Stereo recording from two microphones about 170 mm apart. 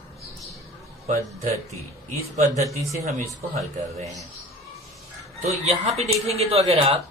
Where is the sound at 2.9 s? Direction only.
40° right (ahead or behind).